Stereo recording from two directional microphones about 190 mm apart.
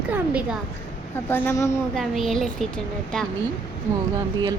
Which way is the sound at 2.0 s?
Centre (ahead or behind).